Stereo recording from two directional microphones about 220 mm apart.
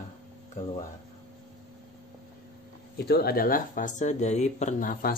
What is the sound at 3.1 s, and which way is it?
Speech, 45° left (ahead or behind).